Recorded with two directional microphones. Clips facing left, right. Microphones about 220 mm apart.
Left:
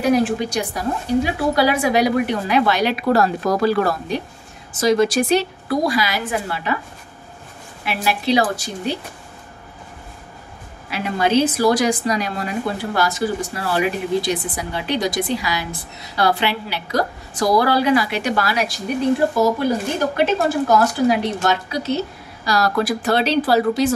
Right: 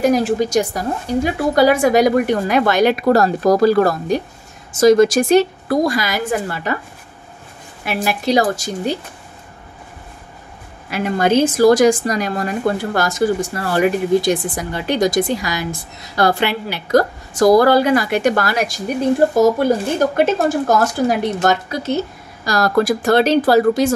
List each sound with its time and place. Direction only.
0.0 s a woman's voice: 40° right (ahead or behind)
7.8 s a woman's voice: 45° right (ahead or behind)
10.9 s a woman's voice: 50° right (ahead or behind)
20.2 s a woman's voice: 45° right (ahead or behind)